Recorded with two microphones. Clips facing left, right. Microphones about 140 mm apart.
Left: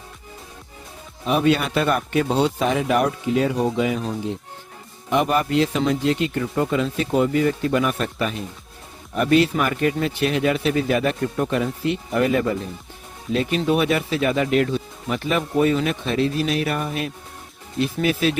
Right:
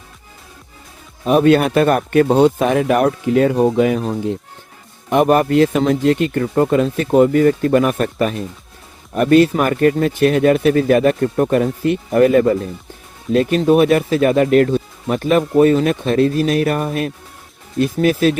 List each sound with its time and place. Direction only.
1.2 s speech: 45° right (ahead or behind)